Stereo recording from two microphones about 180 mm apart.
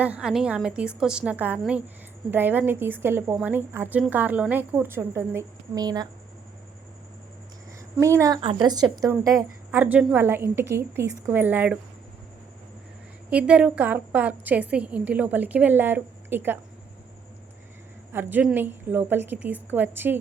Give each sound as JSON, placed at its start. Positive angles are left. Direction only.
{"t": 0.0, "sound": "a woman's voice", "side_deg": -5}
{"t": 7.9, "sound": "a woman's voice", "side_deg": -15}
{"t": 8.4, "sound": "a woman's voice", "side_deg": -30}
{"t": 13.3, "sound": "a woman's voice", "side_deg": -5}
{"t": 18.1, "sound": "a woman's voice", "side_deg": -10}